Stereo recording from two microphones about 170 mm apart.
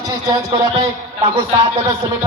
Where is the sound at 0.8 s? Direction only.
35° right (ahead or behind).